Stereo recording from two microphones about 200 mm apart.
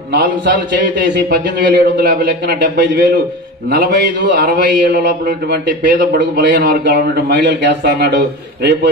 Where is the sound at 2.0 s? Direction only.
50° right (ahead or behind).